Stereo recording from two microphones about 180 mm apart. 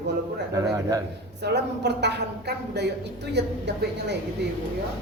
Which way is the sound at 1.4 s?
70° right (ahead or behind).